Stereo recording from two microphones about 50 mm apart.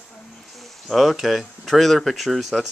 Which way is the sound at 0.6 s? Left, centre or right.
Centre.